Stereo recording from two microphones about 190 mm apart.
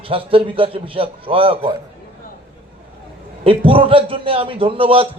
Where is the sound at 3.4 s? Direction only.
30° right (ahead or behind).